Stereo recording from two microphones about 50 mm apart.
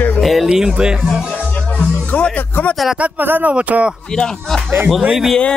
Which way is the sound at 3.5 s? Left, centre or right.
Right.